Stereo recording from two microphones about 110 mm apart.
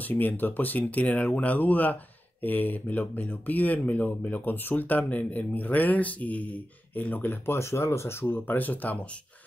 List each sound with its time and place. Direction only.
0.0 s speech: 15° left (ahead or behind)